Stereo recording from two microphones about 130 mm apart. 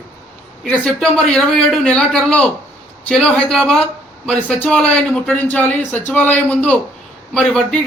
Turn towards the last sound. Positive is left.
turn(degrees=5)  # may be behind; listen again after turning